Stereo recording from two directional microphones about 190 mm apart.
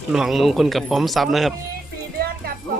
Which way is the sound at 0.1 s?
Centre (ahead or behind).